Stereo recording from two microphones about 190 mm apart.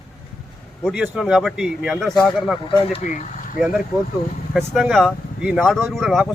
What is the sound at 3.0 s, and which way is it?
Speech, 40° left (ahead or behind).